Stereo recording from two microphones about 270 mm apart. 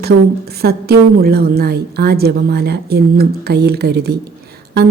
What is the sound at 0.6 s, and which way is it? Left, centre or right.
A woman's voice, right.